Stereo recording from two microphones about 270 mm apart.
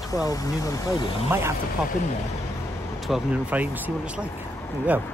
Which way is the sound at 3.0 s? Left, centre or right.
Centre.